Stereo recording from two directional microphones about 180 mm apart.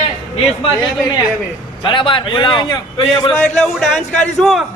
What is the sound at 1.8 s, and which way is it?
A man's voice, 30° left (ahead or behind).